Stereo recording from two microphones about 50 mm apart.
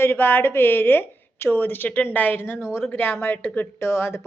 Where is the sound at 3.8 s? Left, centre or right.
Left.